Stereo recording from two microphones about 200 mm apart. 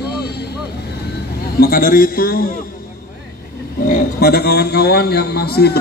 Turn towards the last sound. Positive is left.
turn(degrees=50)  # may be behind; listen again after turning